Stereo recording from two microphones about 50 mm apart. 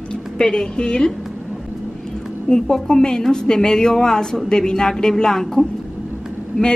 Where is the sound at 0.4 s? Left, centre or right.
Centre.